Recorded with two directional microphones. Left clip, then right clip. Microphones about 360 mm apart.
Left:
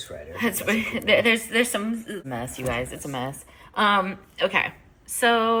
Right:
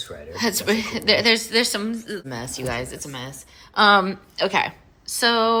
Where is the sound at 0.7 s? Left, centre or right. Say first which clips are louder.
Even; centre.